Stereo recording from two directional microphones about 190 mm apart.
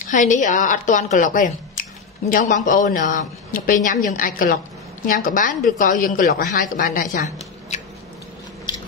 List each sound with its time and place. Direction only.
0.0 s a woman's voice: 45° left (ahead or behind)